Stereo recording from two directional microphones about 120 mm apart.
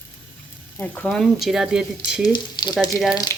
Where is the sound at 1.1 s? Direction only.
Centre (ahead or behind).